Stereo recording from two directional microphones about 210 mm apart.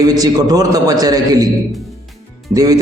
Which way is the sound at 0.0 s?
15° right (ahead or behind).